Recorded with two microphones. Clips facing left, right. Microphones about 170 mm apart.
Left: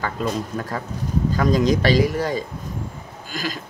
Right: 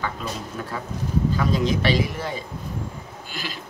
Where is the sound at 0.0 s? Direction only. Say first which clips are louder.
Left 5 dB; 45° left (ahead or behind).